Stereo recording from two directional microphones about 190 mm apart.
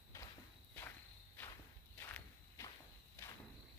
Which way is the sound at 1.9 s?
10° left (ahead or behind).